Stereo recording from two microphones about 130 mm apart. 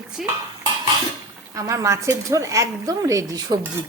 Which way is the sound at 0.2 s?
Centre (ahead or behind).